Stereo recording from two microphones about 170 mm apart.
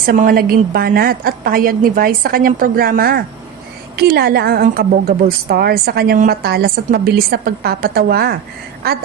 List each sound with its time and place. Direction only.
0.0 s a woman's voice: 55° right (ahead or behind)